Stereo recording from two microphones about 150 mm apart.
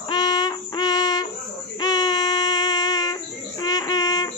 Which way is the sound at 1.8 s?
25° left (ahead or behind).